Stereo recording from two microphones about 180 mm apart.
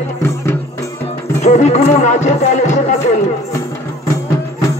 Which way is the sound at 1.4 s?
40° left (ahead or behind).